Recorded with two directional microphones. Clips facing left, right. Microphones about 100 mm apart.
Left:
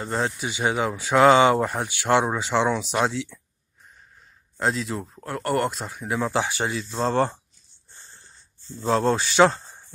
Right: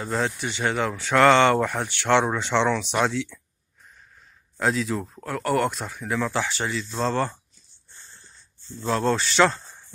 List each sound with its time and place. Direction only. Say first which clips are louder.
0.0 s speech: even; 5° left (ahead or behind)
4.6 s speech: right 1 dB; centre (ahead or behind)
5.9 s speech: left 3 dB; 10° left (ahead or behind)
9.0 s speech: left 2 dB; 15° left (ahead or behind)